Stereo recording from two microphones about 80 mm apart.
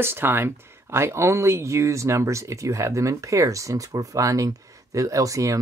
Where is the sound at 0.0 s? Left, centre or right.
Right.